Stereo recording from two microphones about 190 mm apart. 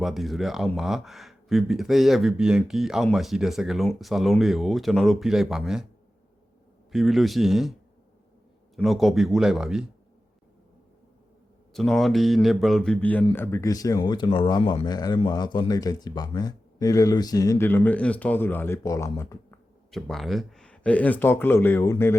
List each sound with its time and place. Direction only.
0.0 s speech: centre (ahead or behind)
6.9 s speech: centre (ahead or behind)
11.7 s speech: centre (ahead or behind)
19.9 s speech: centre (ahead or behind)